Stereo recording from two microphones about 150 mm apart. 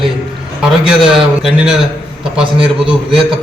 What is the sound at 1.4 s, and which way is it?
Speech, 5° right (ahead or behind).